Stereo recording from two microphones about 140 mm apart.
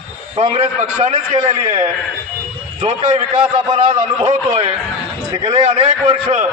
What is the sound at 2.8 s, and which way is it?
A man's voice, 50° right (ahead or behind).